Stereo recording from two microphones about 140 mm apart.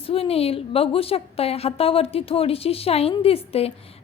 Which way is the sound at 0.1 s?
45° left (ahead or behind).